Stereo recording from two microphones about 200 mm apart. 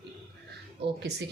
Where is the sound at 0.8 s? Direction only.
55° right (ahead or behind).